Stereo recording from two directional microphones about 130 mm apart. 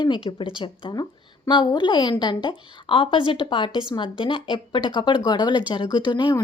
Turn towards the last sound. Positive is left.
turn(degrees=35)  # may be behind; listen again after turning